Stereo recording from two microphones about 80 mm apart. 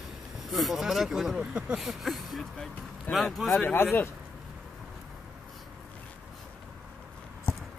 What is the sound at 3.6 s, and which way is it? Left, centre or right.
Speech, left.